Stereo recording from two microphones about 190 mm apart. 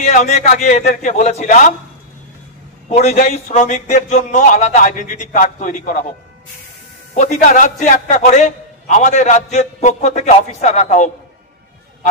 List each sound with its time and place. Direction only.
0.0 s a man's voice: 40° left (ahead or behind)
2.9 s a man's voice: 35° left (ahead or behind)
7.2 s a man's voice: 40° left (ahead or behind)